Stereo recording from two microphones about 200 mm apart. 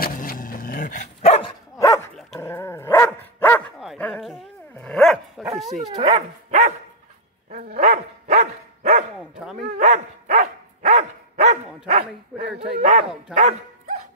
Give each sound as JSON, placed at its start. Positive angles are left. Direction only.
{"t": 0.0, "sound": "dog", "side_deg": 45}
{"t": 1.8, "sound": "dog", "side_deg": 15}
{"t": 5.8, "sound": "speech", "side_deg": -30}
{"t": 7.5, "sound": "dog", "side_deg": -40}
{"t": 12.4, "sound": "bow-wow", "side_deg": -45}
{"t": 13.3, "sound": "dog", "side_deg": -40}